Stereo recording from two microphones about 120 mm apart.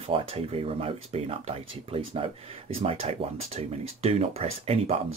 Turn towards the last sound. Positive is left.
turn(degrees=-55)  # may be behind; listen again after turning